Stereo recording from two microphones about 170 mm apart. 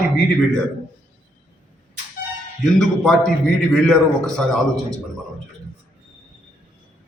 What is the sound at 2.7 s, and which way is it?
A man's voice, 5° left (ahead or behind).